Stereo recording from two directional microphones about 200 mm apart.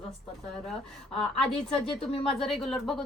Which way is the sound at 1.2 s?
5° left (ahead or behind).